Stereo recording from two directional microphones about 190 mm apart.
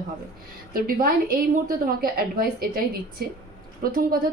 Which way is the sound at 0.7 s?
50° right (ahead or behind).